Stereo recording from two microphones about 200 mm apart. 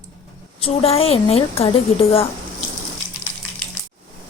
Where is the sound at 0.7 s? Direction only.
30° left (ahead or behind).